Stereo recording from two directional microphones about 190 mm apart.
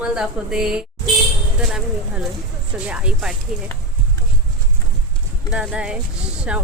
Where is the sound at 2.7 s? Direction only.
5° right (ahead or behind).